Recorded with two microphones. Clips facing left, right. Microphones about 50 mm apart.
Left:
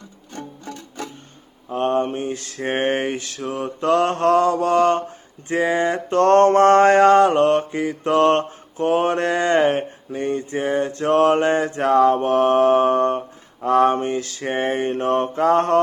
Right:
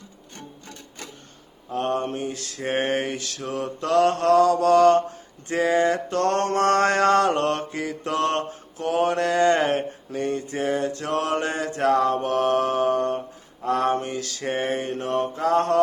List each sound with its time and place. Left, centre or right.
1.8 s mantra: left